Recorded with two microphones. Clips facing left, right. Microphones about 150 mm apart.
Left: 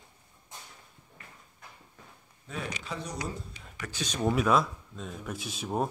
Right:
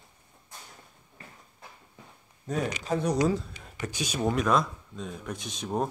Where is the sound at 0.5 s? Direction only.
20° left (ahead or behind).